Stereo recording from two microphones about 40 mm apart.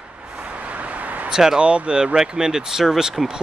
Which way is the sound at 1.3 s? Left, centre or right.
Centre.